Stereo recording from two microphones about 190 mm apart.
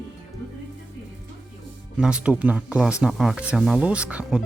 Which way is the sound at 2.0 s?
5° right (ahead or behind).